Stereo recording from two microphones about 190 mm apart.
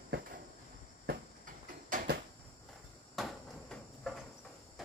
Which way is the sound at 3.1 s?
Centre (ahead or behind).